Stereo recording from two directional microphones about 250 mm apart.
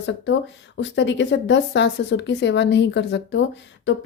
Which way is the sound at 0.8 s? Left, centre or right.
Left.